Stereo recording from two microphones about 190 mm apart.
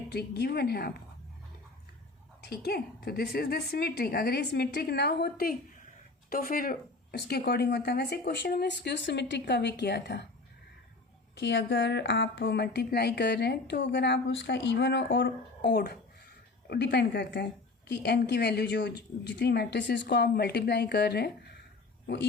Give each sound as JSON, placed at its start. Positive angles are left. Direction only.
{"t": 0.1, "sound": "a woman's voice", "side_deg": 60}
{"t": 2.5, "sound": "a woman's voice", "side_deg": 55}
{"t": 11.3, "sound": "a woman's voice", "side_deg": 65}